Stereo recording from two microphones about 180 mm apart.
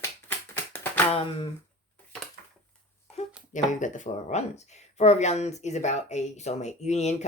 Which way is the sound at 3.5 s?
45° left (ahead or behind).